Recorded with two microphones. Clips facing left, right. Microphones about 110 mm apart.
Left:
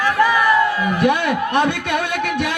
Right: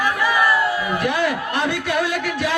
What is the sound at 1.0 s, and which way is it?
A man's voice, 60° left (ahead or behind).